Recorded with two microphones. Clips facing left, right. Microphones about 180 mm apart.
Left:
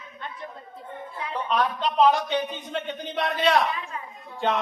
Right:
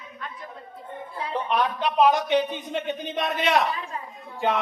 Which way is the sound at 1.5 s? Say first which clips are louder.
Even; 15° right (ahead or behind).